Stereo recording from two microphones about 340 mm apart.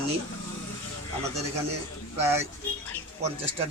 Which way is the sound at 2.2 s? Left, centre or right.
Centre.